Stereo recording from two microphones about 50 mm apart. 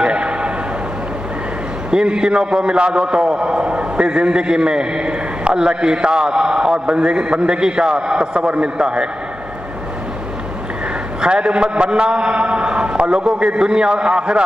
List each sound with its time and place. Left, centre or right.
0.0 s a sound: centre
1.9 s a man's voice: centre
11.1 s a man's voice: centre